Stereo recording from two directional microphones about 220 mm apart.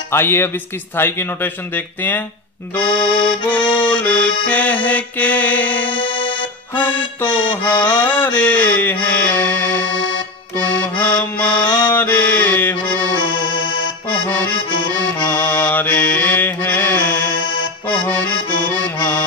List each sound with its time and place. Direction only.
0.1 s music: 10° left (ahead or behind)
2.7 s accordion: 5° left (ahead or behind)
3.0 s accordion: 20° left (ahead or behind)
3.6 s music: 5° left (ahead or behind)
5.9 s music: 20° left (ahead or behind)
7.2 s music: 5° left (ahead or behind)
14.1 s accordion: 5° left (ahead or behind)
15.1 s music: 5° left (ahead or behind)
17.8 s accordion: 5° left (ahead or behind)